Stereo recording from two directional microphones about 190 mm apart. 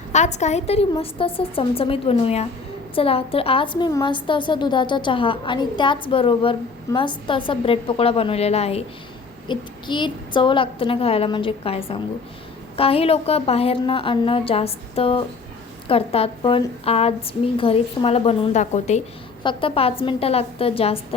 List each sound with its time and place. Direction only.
0.1 s a woman's voice: 35° left (ahead or behind)
19.4 s a woman's voice: 25° left (ahead or behind)